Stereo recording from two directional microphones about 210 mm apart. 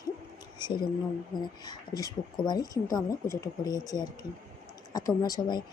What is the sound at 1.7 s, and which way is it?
Speech, 20° left (ahead or behind).